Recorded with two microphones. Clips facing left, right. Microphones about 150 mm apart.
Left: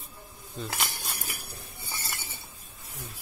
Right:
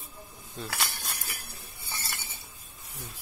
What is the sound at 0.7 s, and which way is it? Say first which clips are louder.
Speech: left 1 dB; 15° left (ahead or behind).